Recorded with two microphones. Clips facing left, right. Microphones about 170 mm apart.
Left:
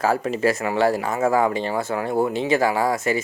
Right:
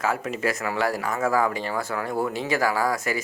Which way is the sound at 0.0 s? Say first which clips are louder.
Left 5 dB; 35° left (ahead or behind).